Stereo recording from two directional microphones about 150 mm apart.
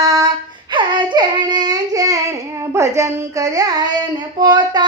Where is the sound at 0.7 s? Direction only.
30° right (ahead or behind).